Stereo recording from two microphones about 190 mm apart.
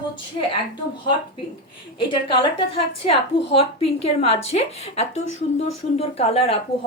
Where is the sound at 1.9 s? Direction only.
25° left (ahead or behind).